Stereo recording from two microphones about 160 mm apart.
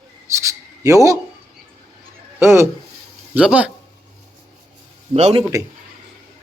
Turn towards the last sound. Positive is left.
turn(degrees=-35)  # may be behind; listen again after turning